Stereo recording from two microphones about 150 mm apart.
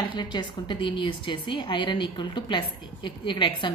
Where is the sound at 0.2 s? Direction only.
30° left (ahead or behind).